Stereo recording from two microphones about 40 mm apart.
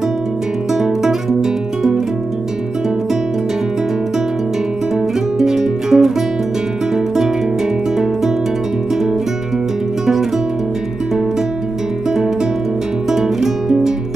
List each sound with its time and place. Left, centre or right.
0.8 s music: centre
5.4 s music: centre
13.1 s music: centre